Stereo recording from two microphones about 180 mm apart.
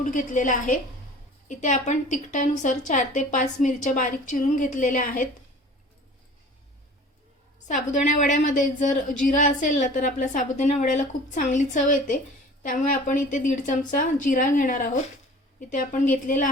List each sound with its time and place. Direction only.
0.0 s a woman's voice: 45° left (ahead or behind)
7.7 s a woman's voice: 40° left (ahead or behind)